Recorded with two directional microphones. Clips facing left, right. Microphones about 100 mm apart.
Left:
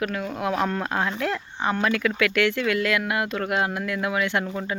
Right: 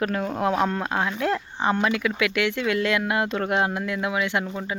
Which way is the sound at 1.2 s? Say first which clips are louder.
Right 2 dB; 30° right (ahead or behind).